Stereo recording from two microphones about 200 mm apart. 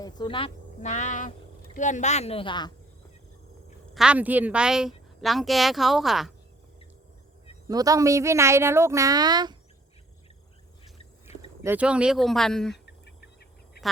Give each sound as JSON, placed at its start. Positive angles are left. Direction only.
{"t": 0.0, "sound": "a woman's voice", "side_deg": 25}
{"t": 3.9, "sound": "speech", "side_deg": -5}
{"t": 7.7, "sound": "a woman's voice", "side_deg": -20}
{"t": 11.6, "sound": "speech", "side_deg": -10}